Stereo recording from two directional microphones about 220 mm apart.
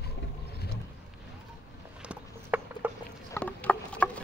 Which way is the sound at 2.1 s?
10° right (ahead or behind).